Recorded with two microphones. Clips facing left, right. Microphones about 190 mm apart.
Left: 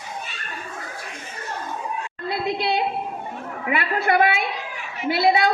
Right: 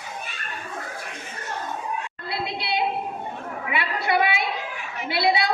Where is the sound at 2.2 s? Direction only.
45° left (ahead or behind).